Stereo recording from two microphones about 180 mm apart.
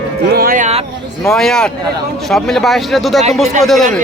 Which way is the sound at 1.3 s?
Centre (ahead or behind).